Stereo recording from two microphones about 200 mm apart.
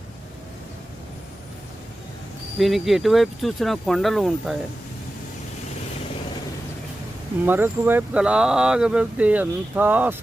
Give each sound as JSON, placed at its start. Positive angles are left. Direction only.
{"t": 2.6, "sound": "speech", "side_deg": 0}
{"t": 7.4, "sound": "speech", "side_deg": -10}